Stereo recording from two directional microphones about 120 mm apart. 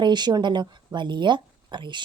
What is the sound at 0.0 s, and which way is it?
A woman's voice, 40° right (ahead or behind).